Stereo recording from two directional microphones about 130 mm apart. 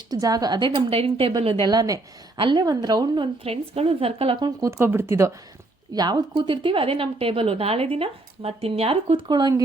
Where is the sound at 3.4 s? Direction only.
50° right (ahead or behind).